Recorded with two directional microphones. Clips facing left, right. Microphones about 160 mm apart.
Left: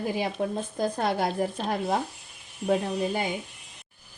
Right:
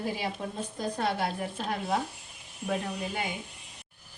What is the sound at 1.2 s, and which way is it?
Speech, 40° left (ahead or behind).